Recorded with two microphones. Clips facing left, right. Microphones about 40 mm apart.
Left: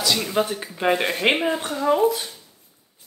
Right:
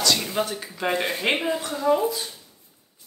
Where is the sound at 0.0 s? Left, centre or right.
Centre; by 2.0 s left.